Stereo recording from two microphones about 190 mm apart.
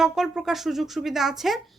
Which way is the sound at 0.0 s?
Centre (ahead or behind).